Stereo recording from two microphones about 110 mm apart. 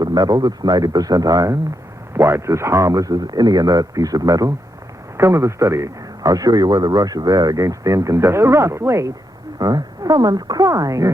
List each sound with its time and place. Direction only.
0.0 s a man's voice: 40° right (ahead or behind)
2.1 s a man's voice: 25° right (ahead or behind)